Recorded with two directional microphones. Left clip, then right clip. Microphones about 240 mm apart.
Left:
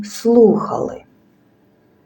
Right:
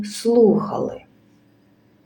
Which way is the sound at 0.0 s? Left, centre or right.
Centre.